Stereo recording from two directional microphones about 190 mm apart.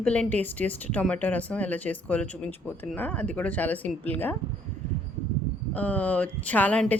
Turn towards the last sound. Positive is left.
turn(degrees=5)  # may be behind; listen again after turning